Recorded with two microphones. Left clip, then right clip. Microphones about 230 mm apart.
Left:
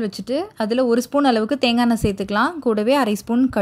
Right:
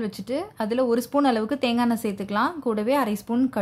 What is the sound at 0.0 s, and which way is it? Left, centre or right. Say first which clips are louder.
Speech: left 5 dB; centre.